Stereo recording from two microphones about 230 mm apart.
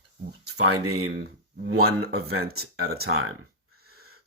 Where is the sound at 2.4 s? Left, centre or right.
Right.